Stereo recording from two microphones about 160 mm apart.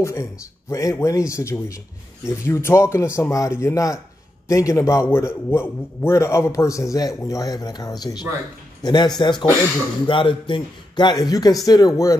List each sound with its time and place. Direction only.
0.0 s a man's voice: 15° left (ahead or behind)